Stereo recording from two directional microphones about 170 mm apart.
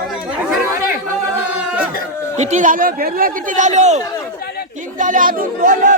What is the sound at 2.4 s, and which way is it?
Speech, 45° right (ahead or behind).